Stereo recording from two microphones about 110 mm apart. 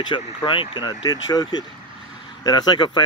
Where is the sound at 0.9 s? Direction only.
35° left (ahead or behind).